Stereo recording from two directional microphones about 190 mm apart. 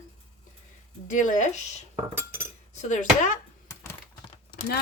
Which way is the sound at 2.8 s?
40° left (ahead or behind).